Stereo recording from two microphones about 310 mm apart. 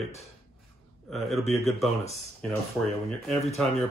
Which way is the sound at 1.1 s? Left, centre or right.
Centre.